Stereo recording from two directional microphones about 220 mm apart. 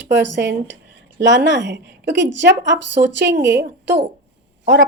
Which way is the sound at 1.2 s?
55° right (ahead or behind).